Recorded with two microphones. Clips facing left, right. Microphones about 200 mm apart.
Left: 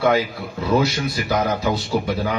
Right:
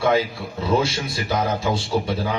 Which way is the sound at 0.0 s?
30° right (ahead or behind).